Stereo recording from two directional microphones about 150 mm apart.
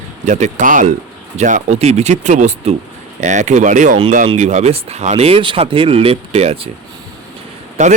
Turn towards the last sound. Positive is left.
turn(degrees=-55)  # may be behind; listen again after turning